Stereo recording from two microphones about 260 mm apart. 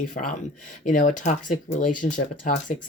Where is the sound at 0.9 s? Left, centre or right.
Left.